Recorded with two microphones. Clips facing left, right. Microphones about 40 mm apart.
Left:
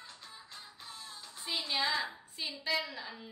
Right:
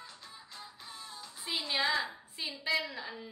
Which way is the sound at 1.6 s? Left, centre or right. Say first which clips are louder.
Right 2 dB; centre.